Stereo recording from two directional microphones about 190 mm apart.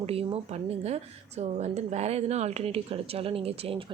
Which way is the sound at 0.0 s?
30° right (ahead or behind).